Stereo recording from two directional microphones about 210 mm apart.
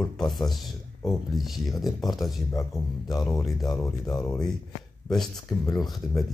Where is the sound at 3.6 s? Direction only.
15° left (ahead or behind).